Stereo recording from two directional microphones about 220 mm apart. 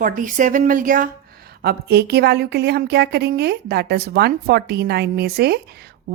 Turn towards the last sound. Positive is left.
turn(degrees=-45)  # may be behind; listen again after turning